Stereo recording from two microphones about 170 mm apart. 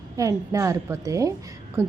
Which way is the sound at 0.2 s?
15° right (ahead or behind).